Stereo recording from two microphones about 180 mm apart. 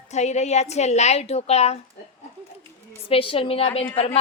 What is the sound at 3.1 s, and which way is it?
A woman's voice, 30° left (ahead or behind).